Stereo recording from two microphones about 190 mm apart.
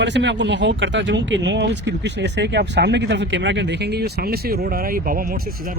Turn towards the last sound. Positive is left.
turn(degrees=-50)  # may be behind; listen again after turning